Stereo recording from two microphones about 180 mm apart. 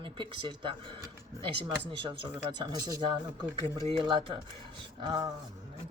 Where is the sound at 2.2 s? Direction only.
25° right (ahead or behind).